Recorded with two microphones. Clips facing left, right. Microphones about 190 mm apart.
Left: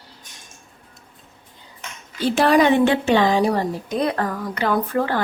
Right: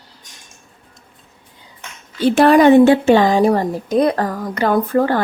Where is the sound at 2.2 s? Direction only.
55° right (ahead or behind).